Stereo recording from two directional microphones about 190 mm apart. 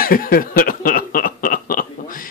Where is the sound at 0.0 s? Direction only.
50° left (ahead or behind).